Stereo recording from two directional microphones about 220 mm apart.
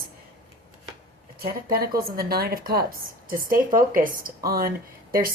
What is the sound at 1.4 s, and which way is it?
A woman's voice, 45° right (ahead or behind).